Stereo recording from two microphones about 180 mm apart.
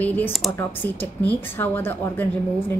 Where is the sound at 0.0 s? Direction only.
10° left (ahead or behind).